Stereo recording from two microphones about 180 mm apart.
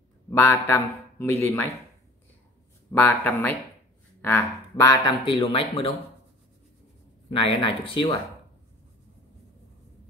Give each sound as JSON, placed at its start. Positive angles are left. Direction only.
{"t": 0.3, "sound": "a man's voice", "side_deg": 15}
{"t": 2.9, "sound": "speech", "side_deg": 10}
{"t": 7.3, "sound": "speech", "side_deg": 30}